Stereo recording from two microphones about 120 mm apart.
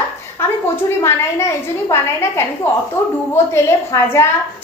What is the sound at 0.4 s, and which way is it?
A woman's voice, 20° left (ahead or behind).